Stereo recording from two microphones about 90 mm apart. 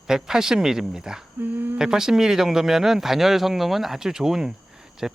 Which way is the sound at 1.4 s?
25° right (ahead or behind).